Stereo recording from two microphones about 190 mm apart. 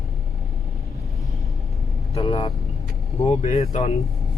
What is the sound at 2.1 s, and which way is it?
Speech, 30° left (ahead or behind).